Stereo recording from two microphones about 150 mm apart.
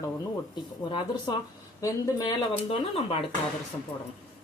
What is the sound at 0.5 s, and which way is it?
Speech, 30° left (ahead or behind).